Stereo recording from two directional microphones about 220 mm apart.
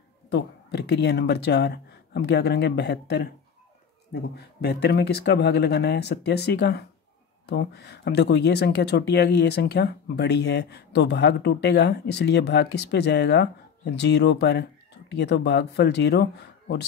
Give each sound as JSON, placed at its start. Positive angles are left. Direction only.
{"t": 0.3, "sound": "speech", "side_deg": 50}